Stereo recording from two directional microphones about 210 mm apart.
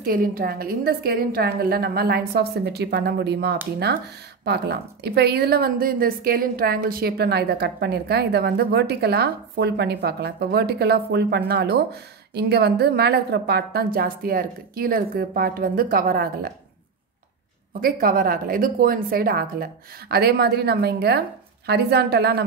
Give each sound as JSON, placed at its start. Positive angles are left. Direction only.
{"t": 0.0, "sound": "a woman's voice", "side_deg": -45}
{"t": 17.7, "sound": "a woman's voice", "side_deg": -40}